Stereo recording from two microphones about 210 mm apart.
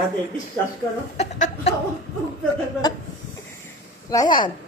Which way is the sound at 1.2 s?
35° left (ahead or behind).